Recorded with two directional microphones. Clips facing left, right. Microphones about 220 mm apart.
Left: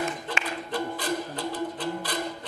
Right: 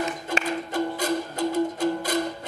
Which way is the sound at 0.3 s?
45° right (ahead or behind).